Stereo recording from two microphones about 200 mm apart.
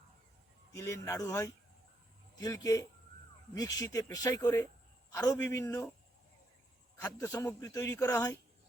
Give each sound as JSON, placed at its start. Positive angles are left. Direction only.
{"t": 0.7, "sound": "a man's voice", "side_deg": 15}
{"t": 7.0, "sound": "a man's voice", "side_deg": 15}